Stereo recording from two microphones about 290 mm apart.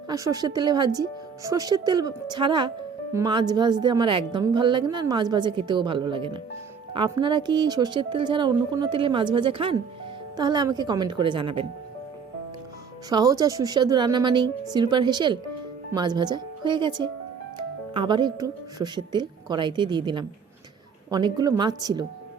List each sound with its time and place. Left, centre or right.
0.1 s speech: centre
13.1 s speech: centre